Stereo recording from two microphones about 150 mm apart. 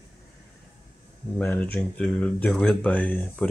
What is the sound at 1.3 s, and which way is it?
Speech, 10° left (ahead or behind).